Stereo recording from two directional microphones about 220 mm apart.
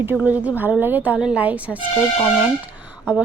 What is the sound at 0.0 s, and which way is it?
A woman's voice, 10° right (ahead or behind).